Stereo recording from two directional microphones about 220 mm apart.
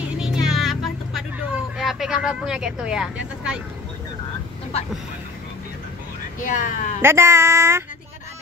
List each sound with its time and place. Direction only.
0.2 s music: centre (ahead or behind)
6.4 s speech: 35° left (ahead or behind)
7.0 s speech: 10° right (ahead or behind)